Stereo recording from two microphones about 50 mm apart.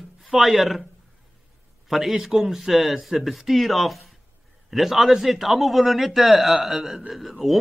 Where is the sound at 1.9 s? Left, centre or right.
Centre.